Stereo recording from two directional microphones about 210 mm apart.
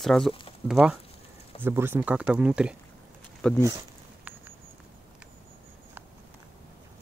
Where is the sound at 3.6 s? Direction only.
15° right (ahead or behind).